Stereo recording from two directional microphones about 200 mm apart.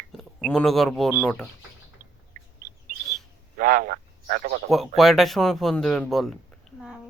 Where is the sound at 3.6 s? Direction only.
45° right (ahead or behind).